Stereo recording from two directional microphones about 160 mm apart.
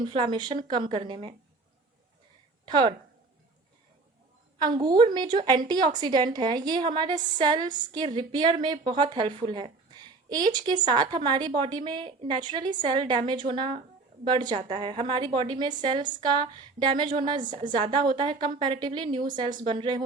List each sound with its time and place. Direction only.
0.0 s speech: 30° right (ahead or behind)
2.6 s speech: 30° right (ahead or behind)
4.5 s a woman's voice: 25° right (ahead or behind)